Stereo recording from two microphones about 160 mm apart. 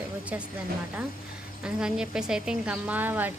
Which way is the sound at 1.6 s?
5° right (ahead or behind).